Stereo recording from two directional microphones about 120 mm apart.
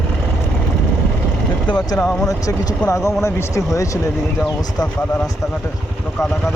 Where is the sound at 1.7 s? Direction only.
35° left (ahead or behind).